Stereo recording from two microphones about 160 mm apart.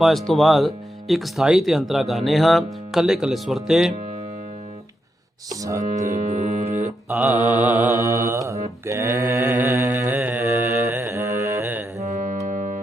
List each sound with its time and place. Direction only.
0.0 s speech: centre (ahead or behind)
5.5 s speech: 20° right (ahead or behind)
6.1 s music: 50° right (ahead or behind)
7.1 s mantra: 10° right (ahead or behind)
11.9 s music: 50° right (ahead or behind)